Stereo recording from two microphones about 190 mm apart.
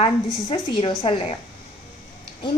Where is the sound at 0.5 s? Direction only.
25° left (ahead or behind).